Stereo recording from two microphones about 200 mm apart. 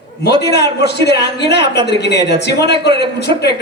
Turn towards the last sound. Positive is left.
turn(degrees=55)  # may be behind; listen again after turning